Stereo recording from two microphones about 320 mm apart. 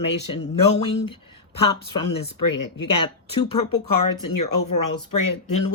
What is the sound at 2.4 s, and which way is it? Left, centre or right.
Speech, left.